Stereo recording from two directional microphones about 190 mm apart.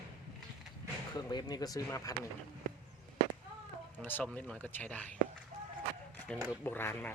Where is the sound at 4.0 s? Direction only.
10° left (ahead or behind).